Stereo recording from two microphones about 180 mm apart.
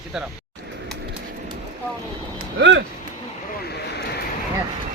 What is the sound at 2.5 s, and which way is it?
Speech, 80° right.